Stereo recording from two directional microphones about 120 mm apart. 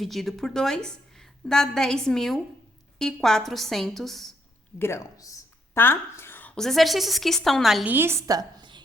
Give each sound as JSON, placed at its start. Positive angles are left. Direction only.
{"t": 0.0, "sound": "a woman's voice", "side_deg": 0}
{"t": 4.8, "sound": "a woman's voice", "side_deg": 25}
{"t": 7.9, "sound": "a woman's voice", "side_deg": -20}
{"t": 8.4, "sound": "a sound", "side_deg": -40}